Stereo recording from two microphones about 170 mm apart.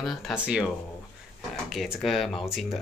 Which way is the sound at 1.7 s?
Centre (ahead or behind).